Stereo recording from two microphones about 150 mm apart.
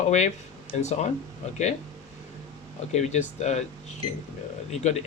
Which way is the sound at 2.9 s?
50° left (ahead or behind).